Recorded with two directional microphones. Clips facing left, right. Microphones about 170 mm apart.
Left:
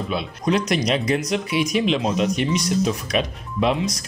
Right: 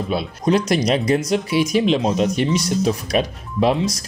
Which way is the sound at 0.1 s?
35° right (ahead or behind).